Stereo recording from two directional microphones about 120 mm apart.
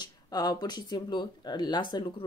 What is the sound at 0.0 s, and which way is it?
Speech, 35° left (ahead or behind).